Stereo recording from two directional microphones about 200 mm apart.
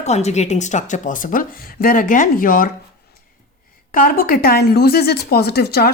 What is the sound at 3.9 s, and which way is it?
Speech, 45° left (ahead or behind).